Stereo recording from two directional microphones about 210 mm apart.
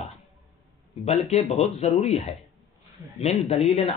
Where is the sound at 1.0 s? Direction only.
30° left (ahead or behind).